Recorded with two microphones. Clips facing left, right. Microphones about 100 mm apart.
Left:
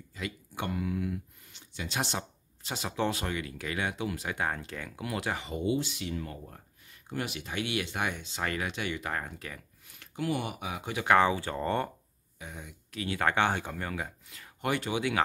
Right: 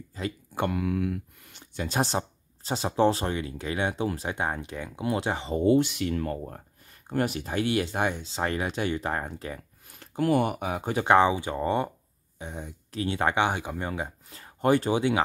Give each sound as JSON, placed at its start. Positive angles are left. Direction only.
{"t": 0.1, "sound": "a sound", "side_deg": -35}
{"t": 0.7, "sound": "speech", "side_deg": -65}
{"t": 5.6, "sound": "speech", "side_deg": -55}
{"t": 9.8, "sound": "speech", "side_deg": -45}
{"t": 11.1, "sound": "speech", "side_deg": -20}
{"t": 12.4, "sound": "speech", "side_deg": -35}
{"t": 13.2, "sound": "speech", "side_deg": -15}